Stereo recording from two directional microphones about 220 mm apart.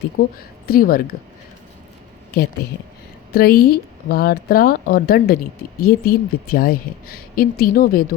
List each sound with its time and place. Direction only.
0.2 s speech: 40° left (ahead or behind)
3.3 s speech: 45° left (ahead or behind)